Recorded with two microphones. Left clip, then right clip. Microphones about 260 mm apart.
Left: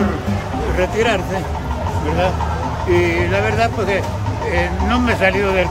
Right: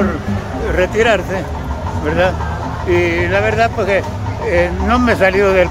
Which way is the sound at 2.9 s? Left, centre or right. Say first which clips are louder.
Right 2 dB; centre.